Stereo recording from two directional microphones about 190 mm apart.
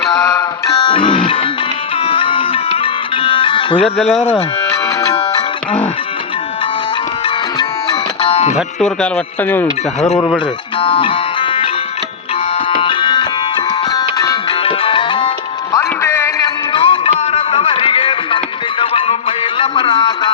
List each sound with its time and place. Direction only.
0.1 s music: 20° left (ahead or behind)
8.2 s music: 30° left (ahead or behind)
8.5 s speech: 5° left (ahead or behind)
10.2 s music: 25° left (ahead or behind)
12.8 s music: 25° left (ahead or behind)
15.7 s music: 15° left (ahead or behind)
16.7 s music: 25° left (ahead or behind)